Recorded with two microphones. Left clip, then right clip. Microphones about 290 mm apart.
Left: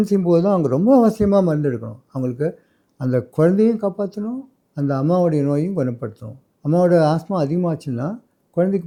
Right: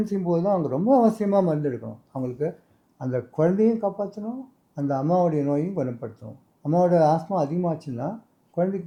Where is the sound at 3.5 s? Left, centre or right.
Left.